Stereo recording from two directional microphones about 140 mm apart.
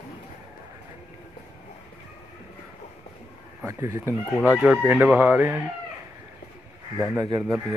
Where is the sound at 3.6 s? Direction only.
20° right (ahead or behind).